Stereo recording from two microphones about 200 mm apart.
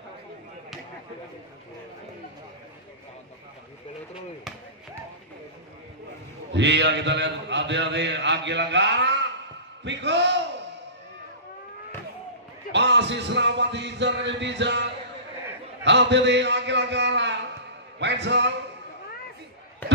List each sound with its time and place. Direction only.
6.5 s a man's voice: 60° right (ahead or behind)
12.7 s a man's voice: 60° right (ahead or behind)